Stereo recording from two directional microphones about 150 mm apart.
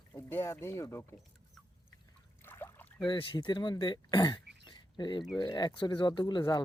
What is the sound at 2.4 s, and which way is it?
Boat, 15° left (ahead or behind).